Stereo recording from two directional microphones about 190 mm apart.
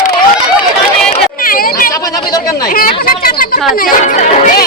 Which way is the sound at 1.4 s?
50° left (ahead or behind).